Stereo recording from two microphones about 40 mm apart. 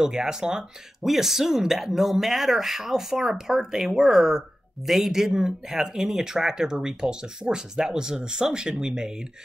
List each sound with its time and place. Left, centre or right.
0.0 s speech: centre
1.0 s speech: centre